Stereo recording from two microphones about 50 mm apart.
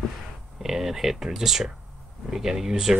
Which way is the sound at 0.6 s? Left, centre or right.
Centre.